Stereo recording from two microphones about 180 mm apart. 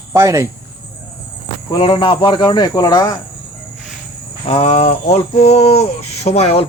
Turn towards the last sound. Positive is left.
turn(degrees=35)  # may be behind; listen again after turning